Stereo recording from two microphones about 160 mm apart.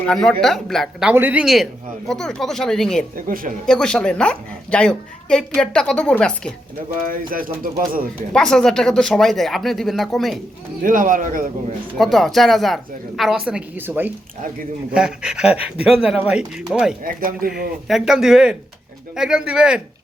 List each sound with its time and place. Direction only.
0.1 s a woman's voice: 5° left (ahead or behind)
1.1 s a woman's voice: 10° right (ahead or behind)
3.2 s speech: 60° right (ahead or behind)
3.7 s a woman's voice: 5° left (ahead or behind)
7.1 s speech: 60° right (ahead or behind)
8.3 s a woman's voice: 5° left (ahead or behind)
10.8 s speech: 55° right (ahead or behind)
11.9 s a woman's voice: centre (ahead or behind)
17.0 s speech: 60° right (ahead or behind)
17.8 s a woman's voice: centre (ahead or behind)